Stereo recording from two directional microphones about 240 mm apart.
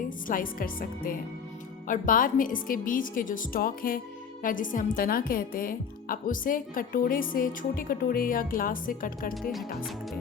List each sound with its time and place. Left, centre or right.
0.3 s a woman's voice: left